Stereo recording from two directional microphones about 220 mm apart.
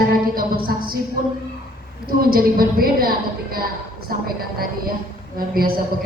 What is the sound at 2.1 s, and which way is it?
A woman's voice, 40° right (ahead or behind).